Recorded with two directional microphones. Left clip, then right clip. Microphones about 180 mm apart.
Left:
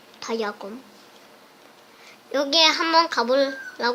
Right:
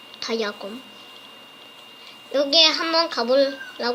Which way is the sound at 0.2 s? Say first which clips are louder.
Right 1 dB; 20° left (ahead or behind).